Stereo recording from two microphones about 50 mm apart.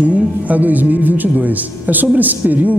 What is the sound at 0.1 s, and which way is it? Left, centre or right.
A man's voice, right.